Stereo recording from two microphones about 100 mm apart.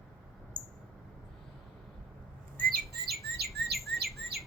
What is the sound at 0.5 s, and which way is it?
Mouse, 10° left (ahead or behind).